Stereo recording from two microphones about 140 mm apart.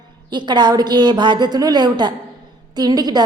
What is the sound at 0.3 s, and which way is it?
A woman's voice, 30° right (ahead or behind).